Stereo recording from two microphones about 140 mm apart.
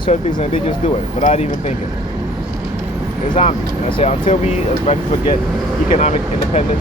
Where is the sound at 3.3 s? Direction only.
40° left (ahead or behind).